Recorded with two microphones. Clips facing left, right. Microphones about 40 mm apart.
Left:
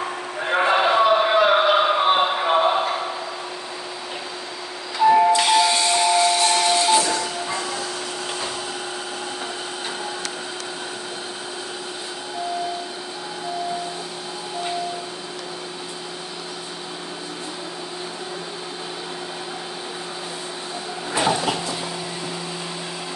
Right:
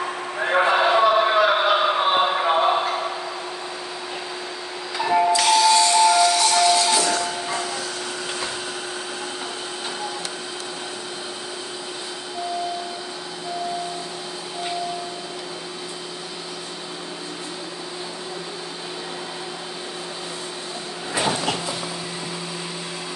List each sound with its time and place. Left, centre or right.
0.4 s a sound: centre
4.9 s music: centre
5.3 s music: left